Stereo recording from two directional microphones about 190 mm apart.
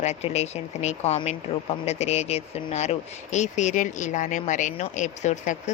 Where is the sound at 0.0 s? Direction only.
35° left (ahead or behind).